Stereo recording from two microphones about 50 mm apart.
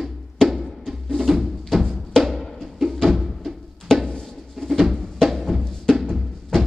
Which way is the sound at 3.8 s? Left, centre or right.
Centre.